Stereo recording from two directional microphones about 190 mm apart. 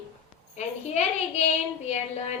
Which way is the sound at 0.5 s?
35° left (ahead or behind).